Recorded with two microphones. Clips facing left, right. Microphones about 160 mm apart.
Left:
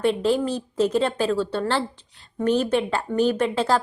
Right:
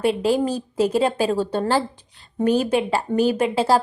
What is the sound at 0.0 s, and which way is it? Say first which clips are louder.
Speech: right 1 dB; 10° right (ahead or behind).